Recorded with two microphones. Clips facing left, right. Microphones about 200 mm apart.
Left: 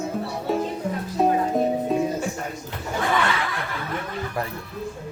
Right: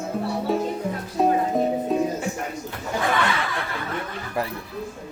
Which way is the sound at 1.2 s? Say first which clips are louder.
Even; centre (ahead or behind).